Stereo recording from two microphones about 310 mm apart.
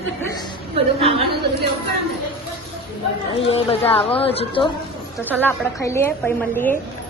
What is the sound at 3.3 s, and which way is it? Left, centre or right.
Speech, centre.